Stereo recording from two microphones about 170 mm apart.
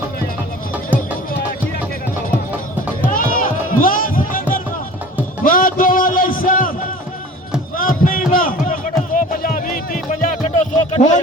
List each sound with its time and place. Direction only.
3.1 s music: 55° left (ahead or behind)
7.8 s a sound: 55° left (ahead or behind)
8.3 s music: 55° left (ahead or behind)